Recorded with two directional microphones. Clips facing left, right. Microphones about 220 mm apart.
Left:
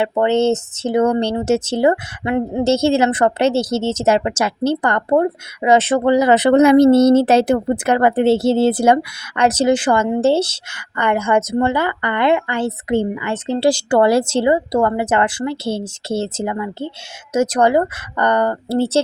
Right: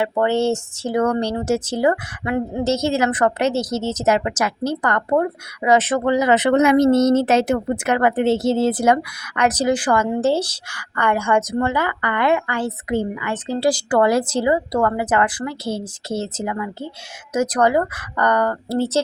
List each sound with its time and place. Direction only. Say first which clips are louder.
0.2 s speech: left 4 dB; 20° left (ahead or behind)